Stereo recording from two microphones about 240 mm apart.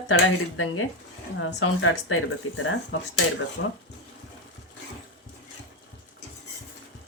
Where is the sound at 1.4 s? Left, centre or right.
Left.